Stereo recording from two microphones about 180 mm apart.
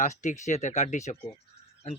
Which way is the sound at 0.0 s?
40° left (ahead or behind).